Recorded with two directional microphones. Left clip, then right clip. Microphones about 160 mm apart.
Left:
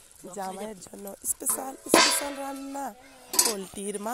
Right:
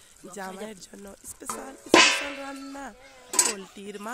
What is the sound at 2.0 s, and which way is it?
Music, 20° right (ahead or behind).